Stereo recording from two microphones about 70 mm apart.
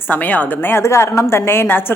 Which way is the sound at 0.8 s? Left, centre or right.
Left.